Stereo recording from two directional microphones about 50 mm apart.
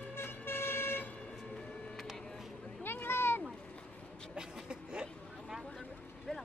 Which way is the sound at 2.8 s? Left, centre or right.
Left.